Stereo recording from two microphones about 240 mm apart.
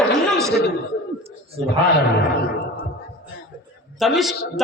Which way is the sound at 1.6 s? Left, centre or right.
Right.